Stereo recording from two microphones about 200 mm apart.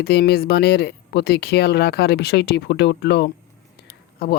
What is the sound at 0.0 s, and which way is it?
Speech, 55° left (ahead or behind).